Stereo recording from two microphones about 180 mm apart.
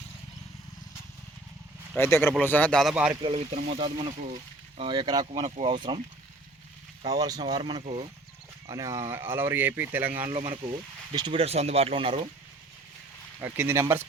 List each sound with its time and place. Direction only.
2.0 s speech: 15° left (ahead or behind)
2.9 s speech: 5° right (ahead or behind)
3.2 s speech: 35° right (ahead or behind)
7.0 s speech: 20° right (ahead or behind)
8.6 s speech: 15° right (ahead or behind)
10.3 s speech: 30° right (ahead or behind)
13.4 s speech: 10° right (ahead or behind)